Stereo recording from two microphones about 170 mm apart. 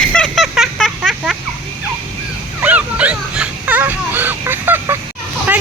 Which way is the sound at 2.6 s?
10° right (ahead or behind).